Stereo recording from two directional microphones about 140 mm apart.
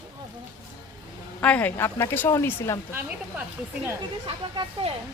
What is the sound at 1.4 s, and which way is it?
Speech, 10° left (ahead or behind).